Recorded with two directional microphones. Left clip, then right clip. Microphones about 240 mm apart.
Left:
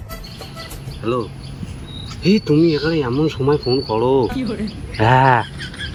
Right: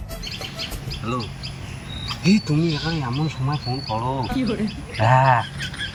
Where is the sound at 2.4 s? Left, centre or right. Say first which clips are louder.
Left 9 dB; centre.